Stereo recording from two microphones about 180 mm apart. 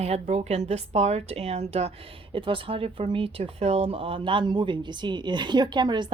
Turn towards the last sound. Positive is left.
turn(degrees=-25)  # may be behind; listen again after turning